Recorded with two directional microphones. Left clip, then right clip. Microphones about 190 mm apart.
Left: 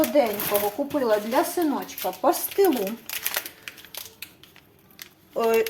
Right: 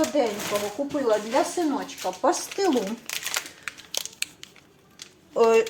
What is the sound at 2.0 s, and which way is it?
Speech, 20° left (ahead or behind).